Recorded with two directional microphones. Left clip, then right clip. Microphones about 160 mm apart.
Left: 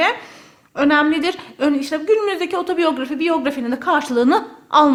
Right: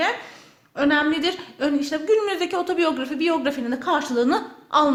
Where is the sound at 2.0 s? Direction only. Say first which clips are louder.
Left 4 dB; 20° left (ahead or behind).